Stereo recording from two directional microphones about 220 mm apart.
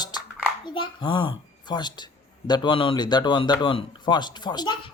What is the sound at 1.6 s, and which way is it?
Speech, 20° left (ahead or behind).